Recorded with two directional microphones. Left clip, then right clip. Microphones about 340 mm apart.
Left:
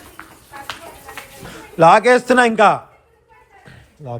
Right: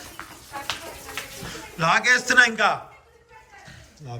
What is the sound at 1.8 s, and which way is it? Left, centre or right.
A man's voice, centre.